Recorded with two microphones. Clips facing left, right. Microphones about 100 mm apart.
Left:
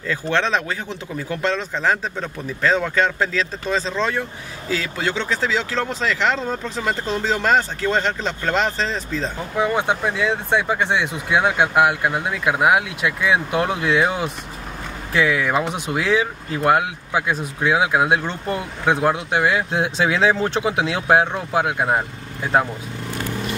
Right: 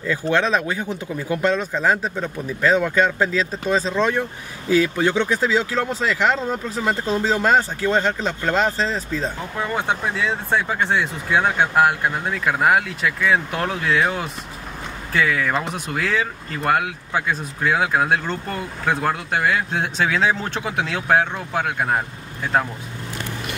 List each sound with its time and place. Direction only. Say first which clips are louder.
0.0 s speech: right 1 dB; 10° right (ahead or behind)
9.6 s speech: left 4 dB; 10° left (ahead or behind)